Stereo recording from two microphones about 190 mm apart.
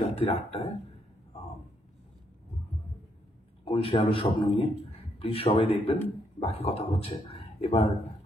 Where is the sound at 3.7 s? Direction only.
30° left (ahead or behind).